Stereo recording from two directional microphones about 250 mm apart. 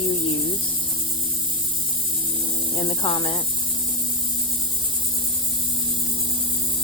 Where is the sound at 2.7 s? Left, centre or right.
Left.